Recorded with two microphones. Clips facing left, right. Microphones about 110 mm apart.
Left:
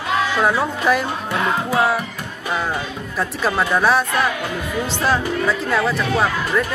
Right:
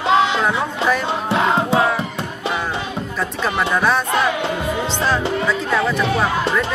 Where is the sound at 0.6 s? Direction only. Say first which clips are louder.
Left 1 dB; 5° left (ahead or behind).